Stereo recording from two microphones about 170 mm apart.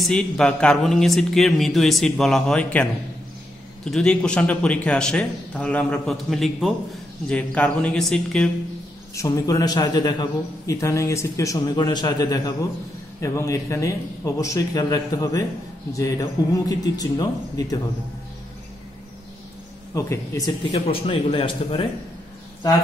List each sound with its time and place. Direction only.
0.0 s a man's voice: 5° left (ahead or behind)
9.1 s a man's voice: 20° left (ahead or behind)
19.9 s a man's voice: 20° left (ahead or behind)
20.7 s a man's voice: 35° left (ahead or behind)